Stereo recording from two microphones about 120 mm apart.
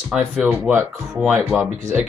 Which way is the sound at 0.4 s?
15° right (ahead or behind).